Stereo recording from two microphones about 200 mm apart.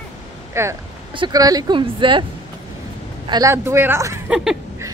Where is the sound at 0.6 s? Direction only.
15° right (ahead or behind).